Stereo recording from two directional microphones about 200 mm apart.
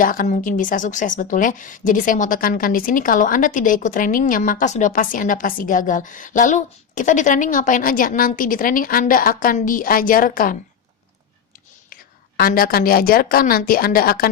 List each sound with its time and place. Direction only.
0.0 s a woman's voice: 45° left (ahead or behind)
12.4 s a woman's voice: 45° left (ahead or behind)